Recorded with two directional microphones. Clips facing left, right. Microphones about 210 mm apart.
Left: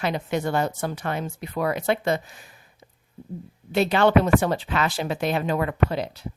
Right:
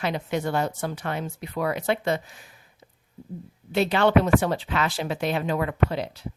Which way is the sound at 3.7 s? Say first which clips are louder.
Left 1 dB; 45° left (ahead or behind).